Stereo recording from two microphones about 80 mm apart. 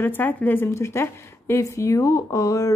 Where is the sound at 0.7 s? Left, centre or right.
Left.